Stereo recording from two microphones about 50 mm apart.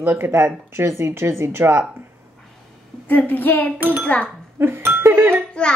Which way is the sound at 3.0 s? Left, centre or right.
Left.